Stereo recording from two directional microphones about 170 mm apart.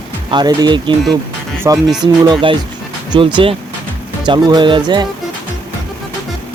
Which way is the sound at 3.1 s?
30° right (ahead or behind).